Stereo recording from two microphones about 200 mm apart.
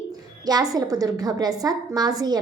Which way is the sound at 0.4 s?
20° right (ahead or behind).